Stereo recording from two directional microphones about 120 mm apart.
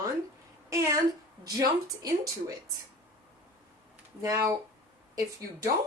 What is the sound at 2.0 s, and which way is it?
Speech, 30° right (ahead or behind).